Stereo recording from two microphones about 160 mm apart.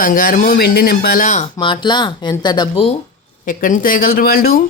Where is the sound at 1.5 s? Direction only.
30° left (ahead or behind).